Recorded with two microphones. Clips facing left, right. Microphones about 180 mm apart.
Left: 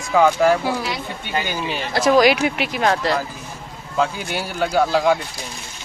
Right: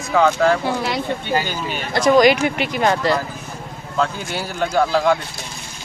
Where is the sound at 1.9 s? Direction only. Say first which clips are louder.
Right 2 dB; centre (ahead or behind).